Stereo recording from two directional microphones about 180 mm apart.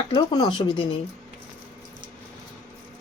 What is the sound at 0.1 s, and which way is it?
Speech, 25° left (ahead or behind).